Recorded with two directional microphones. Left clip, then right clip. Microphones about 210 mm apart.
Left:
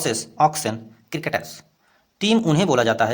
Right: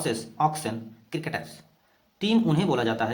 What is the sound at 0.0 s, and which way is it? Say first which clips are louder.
A man's voice: left 6 dB; 40° left (ahead or behind).